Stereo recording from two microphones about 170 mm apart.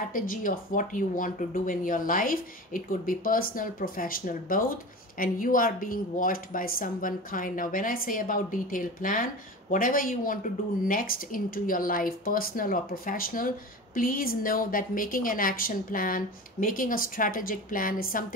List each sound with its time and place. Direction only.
0.1 s speech: 55° left (ahead or behind)